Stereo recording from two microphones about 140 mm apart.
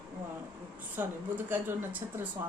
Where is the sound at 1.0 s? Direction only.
15° right (ahead or behind).